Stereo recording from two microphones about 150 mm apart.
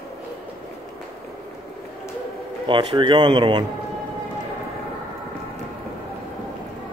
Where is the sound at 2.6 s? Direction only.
30° right (ahead or behind).